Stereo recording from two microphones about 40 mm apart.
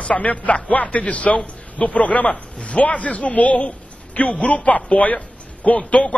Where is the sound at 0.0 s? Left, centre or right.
Left.